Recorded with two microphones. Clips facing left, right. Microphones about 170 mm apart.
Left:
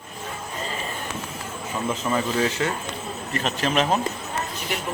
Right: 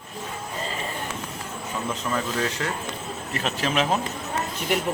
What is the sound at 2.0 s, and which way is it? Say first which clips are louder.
Speech: left 4 dB; 5° left (ahead or behind).